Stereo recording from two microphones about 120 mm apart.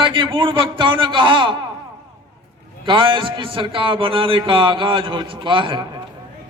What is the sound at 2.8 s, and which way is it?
A man's voice, 45° right (ahead or behind).